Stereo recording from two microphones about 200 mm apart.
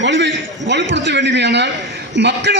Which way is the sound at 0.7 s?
60° right (ahead or behind).